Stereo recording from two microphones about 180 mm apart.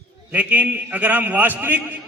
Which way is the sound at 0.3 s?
10° right (ahead or behind).